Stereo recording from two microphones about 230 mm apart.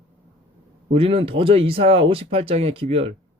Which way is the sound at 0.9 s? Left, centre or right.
Right.